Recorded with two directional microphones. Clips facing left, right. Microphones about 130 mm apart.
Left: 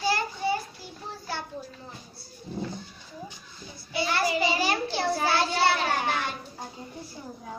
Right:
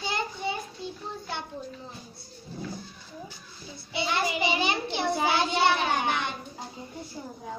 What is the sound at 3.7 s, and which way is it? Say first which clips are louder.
A child's voice: left 1 dB; 25° right (ahead or behind).